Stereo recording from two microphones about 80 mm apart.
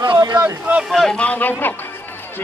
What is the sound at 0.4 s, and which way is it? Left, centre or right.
Speech, centre.